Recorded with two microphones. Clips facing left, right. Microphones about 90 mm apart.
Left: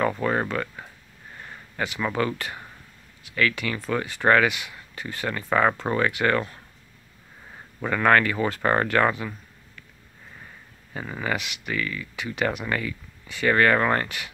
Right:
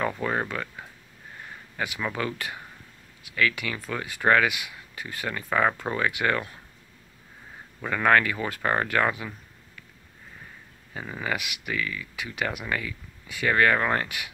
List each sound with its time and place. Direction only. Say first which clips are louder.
0.2 s speech: left 3 dB; centre (ahead or behind)
7.8 s speech: left 2 dB; centre (ahead or behind)
10.9 s speech: left 2 dB; centre (ahead or behind)